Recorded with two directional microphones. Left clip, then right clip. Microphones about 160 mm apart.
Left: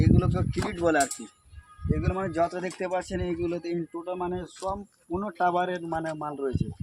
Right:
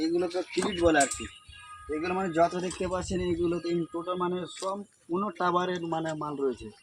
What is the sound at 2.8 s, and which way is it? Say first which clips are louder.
Speech: left 4 dB; 25° left (ahead or behind).